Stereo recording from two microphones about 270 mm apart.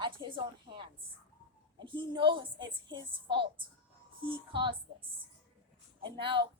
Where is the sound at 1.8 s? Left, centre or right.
Centre.